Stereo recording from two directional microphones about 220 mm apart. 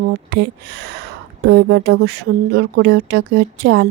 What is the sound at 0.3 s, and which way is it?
Speech, 50° right (ahead or behind).